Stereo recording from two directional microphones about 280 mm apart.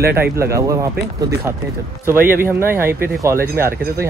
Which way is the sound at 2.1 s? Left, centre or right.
Centre.